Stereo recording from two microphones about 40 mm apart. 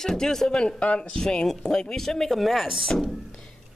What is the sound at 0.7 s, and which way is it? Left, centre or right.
Speech, left.